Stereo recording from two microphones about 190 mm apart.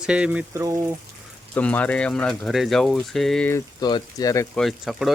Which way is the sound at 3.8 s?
20° left (ahead or behind).